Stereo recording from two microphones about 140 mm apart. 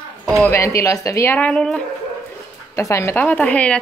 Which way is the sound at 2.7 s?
20° left (ahead or behind).